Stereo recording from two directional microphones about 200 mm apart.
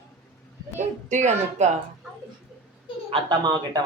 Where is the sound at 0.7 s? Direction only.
35° right (ahead or behind).